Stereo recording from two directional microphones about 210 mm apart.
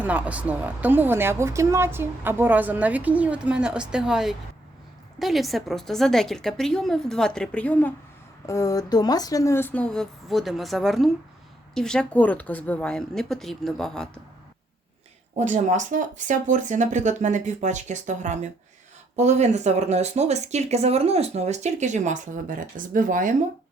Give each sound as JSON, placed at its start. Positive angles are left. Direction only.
{"t": 0.0, "sound": "a woman's voice", "side_deg": -5}
{"t": 15.4, "sound": "speech", "side_deg": -35}